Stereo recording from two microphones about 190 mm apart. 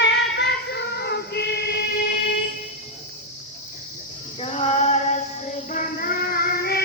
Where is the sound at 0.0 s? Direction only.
65° left (ahead or behind).